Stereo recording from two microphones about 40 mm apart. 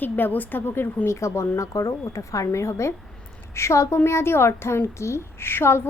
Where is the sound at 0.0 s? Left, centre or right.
Left.